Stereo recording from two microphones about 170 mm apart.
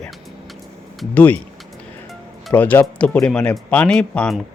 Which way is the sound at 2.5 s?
10° left (ahead or behind).